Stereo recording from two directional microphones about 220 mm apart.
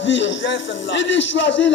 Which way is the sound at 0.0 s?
55° left (ahead or behind).